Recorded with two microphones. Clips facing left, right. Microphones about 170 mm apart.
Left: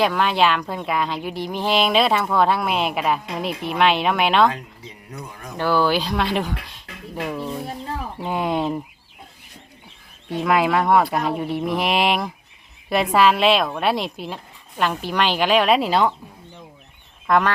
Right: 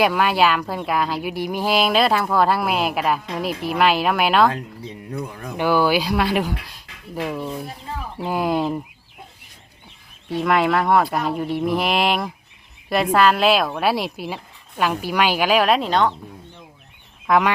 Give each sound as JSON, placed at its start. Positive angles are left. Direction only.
{"t": 0.0, "sound": "speech", "side_deg": -5}
{"t": 4.5, "sound": "speech", "side_deg": -60}
{"t": 5.1, "sound": "speech", "side_deg": -30}
{"t": 5.5, "sound": "speech", "side_deg": -15}
{"t": 10.4, "sound": "speech", "side_deg": 0}
{"t": 17.2, "sound": "speech", "side_deg": -5}